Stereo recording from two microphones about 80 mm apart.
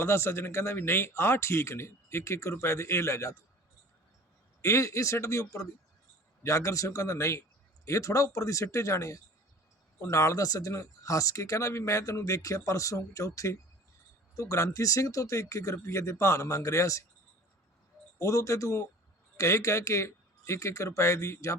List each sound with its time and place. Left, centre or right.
0.0 s speech: left
4.6 s speech: left
18.2 s speech: left